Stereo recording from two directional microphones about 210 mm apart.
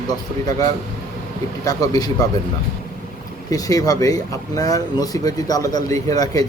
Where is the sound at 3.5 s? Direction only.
15° left (ahead or behind).